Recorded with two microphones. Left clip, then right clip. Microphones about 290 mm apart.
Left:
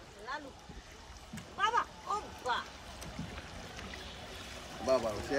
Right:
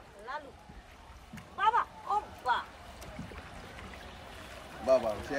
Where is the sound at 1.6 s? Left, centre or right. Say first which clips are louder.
Right 3 dB; right.